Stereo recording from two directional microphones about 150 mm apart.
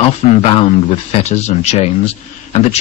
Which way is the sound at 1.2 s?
50° left (ahead or behind).